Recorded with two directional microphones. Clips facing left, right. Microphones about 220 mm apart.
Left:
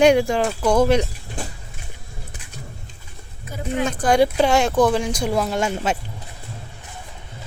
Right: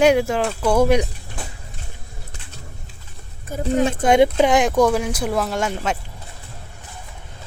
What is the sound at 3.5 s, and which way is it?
Speech, 40° right (ahead or behind).